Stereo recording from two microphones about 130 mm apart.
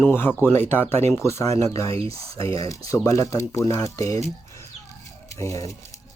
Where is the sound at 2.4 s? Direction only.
25° left (ahead or behind).